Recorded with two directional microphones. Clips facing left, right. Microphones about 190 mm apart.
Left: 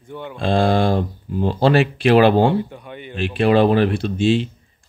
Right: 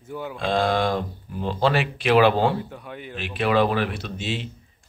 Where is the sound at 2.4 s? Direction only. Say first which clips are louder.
Left 5 dB; centre (ahead or behind).